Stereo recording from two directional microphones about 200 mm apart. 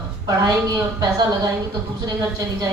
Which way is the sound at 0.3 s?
20° right (ahead or behind).